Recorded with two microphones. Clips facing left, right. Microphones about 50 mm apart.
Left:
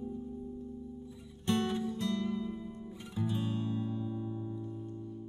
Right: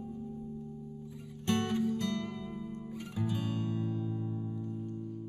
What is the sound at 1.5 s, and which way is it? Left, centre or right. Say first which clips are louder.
Music: right 1 dB; right.